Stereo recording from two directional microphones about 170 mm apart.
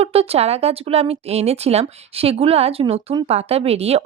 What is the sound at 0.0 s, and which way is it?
Speech, 35° right (ahead or behind).